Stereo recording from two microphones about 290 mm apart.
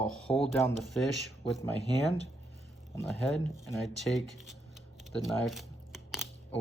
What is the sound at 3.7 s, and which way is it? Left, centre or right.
Speech, centre.